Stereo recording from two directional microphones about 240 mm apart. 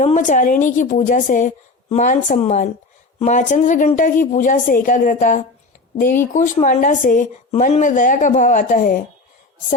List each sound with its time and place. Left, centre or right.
0.0 s speech: left